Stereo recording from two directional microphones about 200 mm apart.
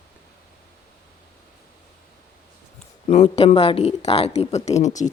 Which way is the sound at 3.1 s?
30° left (ahead or behind).